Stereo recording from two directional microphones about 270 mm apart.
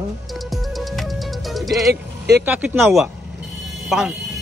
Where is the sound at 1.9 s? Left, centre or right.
Right.